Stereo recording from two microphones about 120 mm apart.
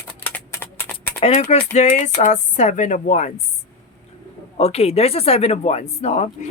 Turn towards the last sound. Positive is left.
turn(degrees=60)  # may be behind; listen again after turning